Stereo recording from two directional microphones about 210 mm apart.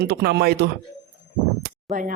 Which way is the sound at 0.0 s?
50° right (ahead or behind).